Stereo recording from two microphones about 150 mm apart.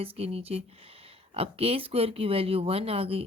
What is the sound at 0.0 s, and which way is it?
Speech, 40° right (ahead or behind).